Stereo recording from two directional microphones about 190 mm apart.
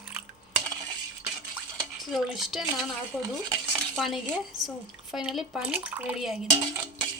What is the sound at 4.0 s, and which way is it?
Speech, centre (ahead or behind).